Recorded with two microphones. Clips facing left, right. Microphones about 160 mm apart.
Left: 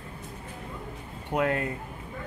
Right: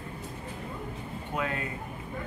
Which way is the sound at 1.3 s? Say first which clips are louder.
Left 7 dB; 60° left (ahead or behind).